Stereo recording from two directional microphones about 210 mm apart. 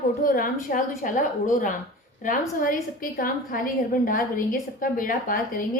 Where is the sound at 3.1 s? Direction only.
45° left (ahead or behind).